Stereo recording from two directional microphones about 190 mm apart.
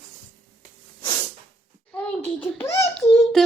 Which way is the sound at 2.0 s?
10° left (ahead or behind).